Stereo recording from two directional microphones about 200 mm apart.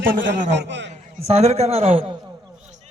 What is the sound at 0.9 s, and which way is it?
A man's voice, 35° right (ahead or behind).